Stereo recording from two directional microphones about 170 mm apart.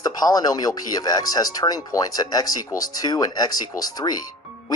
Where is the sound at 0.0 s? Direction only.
20° left (ahead or behind).